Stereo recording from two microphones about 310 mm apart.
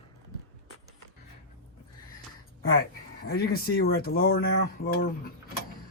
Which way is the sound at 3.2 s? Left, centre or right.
Left.